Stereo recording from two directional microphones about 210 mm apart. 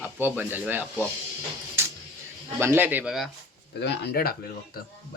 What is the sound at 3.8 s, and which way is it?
Speech, 50° left (ahead or behind).